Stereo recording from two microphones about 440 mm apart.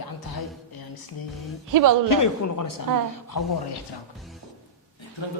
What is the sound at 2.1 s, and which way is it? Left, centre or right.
A woman's voice, left.